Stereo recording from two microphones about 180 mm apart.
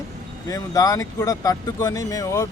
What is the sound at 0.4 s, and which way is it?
Speech, 20° left (ahead or behind).